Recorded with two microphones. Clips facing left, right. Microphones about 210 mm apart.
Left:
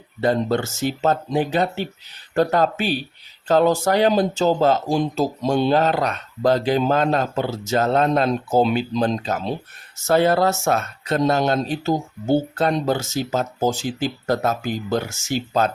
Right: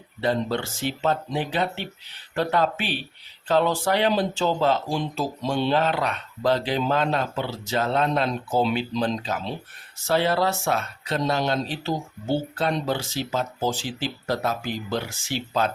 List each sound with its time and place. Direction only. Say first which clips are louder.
0.2 s speech: left 5 dB; 45° left (ahead or behind)